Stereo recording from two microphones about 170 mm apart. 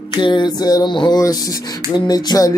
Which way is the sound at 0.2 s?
25° left (ahead or behind).